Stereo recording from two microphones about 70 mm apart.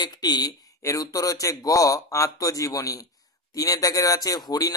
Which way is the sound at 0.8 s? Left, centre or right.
Left.